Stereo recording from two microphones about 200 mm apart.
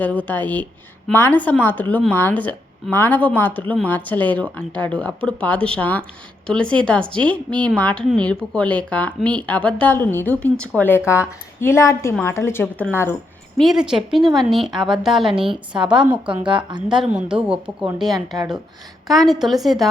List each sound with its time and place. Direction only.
0.0 s a woman's voice: 10° left (ahead or behind)
13.6 s a woman's voice: centre (ahead or behind)
15.4 s a woman's voice: 25° right (ahead or behind)
16.9 s a woman's voice: 5° right (ahead or behind)
17.8 s a woman's voice: 20° right (ahead or behind)
19.0 s a woman's voice: centre (ahead or behind)